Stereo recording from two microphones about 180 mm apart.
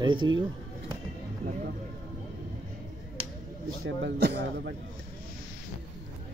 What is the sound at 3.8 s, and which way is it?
Speech, 75° right (ahead or behind).